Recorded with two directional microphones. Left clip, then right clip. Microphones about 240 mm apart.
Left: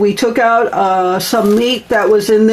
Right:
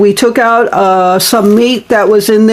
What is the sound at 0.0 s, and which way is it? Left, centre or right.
Speech, right.